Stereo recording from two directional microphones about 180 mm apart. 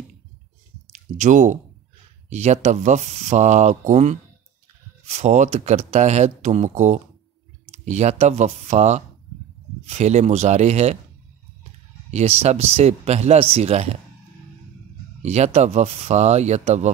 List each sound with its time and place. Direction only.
1.1 s speech: 45° right (ahead or behind)
12.1 s speech: 35° right (ahead or behind)
15.2 s speech: 35° right (ahead or behind)